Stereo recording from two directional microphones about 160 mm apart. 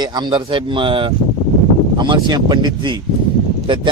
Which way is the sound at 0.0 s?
25° right (ahead or behind).